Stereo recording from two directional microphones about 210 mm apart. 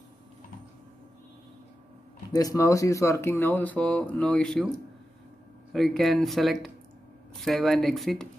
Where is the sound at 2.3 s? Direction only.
15° left (ahead or behind).